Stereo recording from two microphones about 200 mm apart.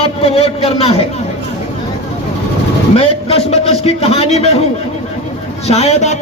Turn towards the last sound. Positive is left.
turn(degrees=35)  # may be behind; listen again after turning